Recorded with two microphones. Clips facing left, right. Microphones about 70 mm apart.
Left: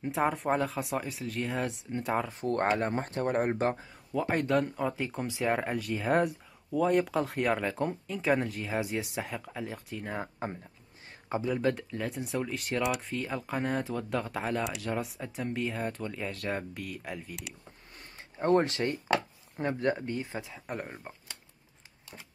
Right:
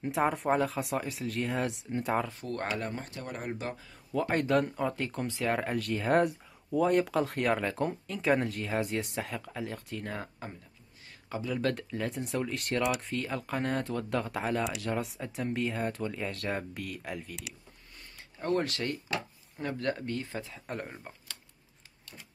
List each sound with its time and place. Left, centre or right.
0.0 s speech: centre
2.4 s speech: left
4.1 s speech: centre
10.4 s speech: left
11.7 s speech: centre
18.4 s speech: left; by 21.1 s centre